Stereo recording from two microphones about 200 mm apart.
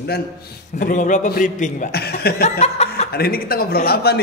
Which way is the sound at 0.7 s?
40° left (ahead or behind).